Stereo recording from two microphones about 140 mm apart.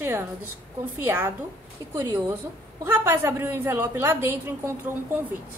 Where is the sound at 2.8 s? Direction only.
15° right (ahead or behind).